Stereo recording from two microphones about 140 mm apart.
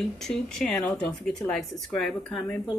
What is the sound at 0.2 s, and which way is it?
Speech, 5° left (ahead or behind).